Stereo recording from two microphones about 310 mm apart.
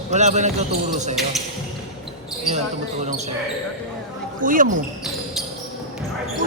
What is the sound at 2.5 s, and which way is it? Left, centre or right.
Speech, right.